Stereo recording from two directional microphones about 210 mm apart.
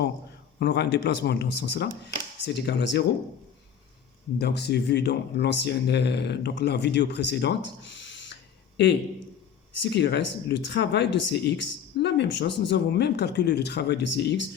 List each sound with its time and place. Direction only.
0.6 s speech: 55° left (ahead or behind)
4.4 s speech: 50° left (ahead or behind)
9.7 s speech: 55° left (ahead or behind)